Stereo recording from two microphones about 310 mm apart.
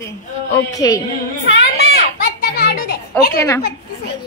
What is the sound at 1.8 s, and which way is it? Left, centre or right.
A child's voice, left.